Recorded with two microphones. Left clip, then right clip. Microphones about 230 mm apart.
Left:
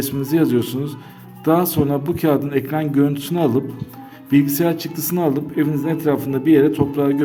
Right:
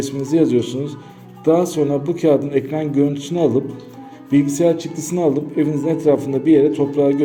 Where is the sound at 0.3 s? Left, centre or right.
Left.